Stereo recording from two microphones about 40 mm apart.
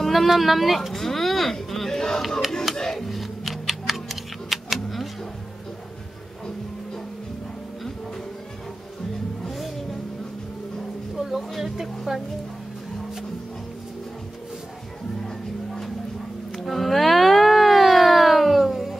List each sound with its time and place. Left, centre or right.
0.0 s a sound: centre
2.7 s tick-tock: centre
11.2 s speech: centre
12.1 s speech: centre
15.2 s music: centre
16.5 s a sound: centre